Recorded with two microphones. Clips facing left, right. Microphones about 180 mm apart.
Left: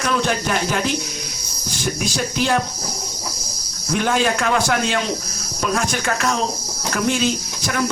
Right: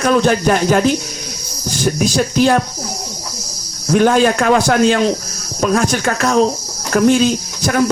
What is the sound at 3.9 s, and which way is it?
Speech, 45° right (ahead or behind).